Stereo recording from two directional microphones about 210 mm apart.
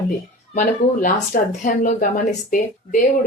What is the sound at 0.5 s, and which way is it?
Speech, 40° left (ahead or behind).